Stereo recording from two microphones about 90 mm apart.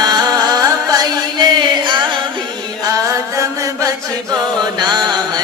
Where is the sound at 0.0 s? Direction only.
45° right (ahead or behind).